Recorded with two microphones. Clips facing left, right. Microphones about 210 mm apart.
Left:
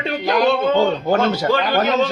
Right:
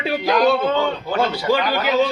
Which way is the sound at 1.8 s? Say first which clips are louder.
Left 1 dB; 45° left (ahead or behind).